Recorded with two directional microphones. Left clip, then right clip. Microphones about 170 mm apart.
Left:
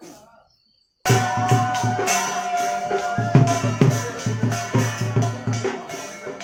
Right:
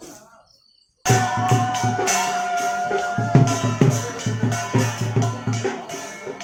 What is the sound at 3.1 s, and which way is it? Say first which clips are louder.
Music: even; 10° left (ahead or behind).